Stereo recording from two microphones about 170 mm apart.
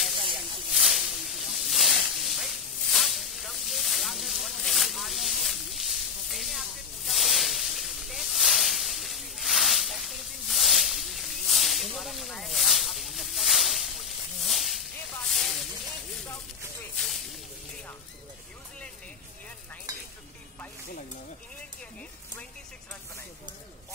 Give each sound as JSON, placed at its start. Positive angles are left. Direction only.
{"t": 0.7, "sound": "snake", "side_deg": 0}
{"t": 6.3, "sound": "a sound", "side_deg": 0}
{"t": 7.1, "sound": "hiss", "side_deg": 0}
{"t": 15.1, "sound": "snake", "side_deg": 5}
{"t": 16.9, "sound": "snake", "side_deg": 5}
{"t": 19.9, "sound": "stir", "side_deg": -20}